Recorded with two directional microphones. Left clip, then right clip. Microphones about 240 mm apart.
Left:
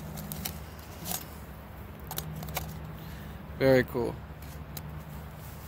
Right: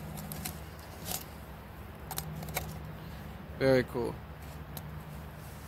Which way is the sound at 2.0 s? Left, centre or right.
Centre.